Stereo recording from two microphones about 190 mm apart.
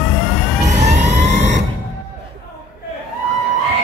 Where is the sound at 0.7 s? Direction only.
40° right (ahead or behind).